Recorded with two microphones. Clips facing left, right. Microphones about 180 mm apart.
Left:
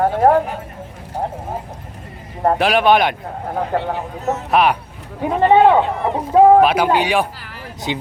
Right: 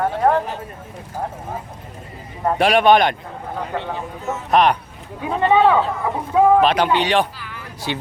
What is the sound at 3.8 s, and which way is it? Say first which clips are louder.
Speech: left 4 dB; 40° left (ahead or behind).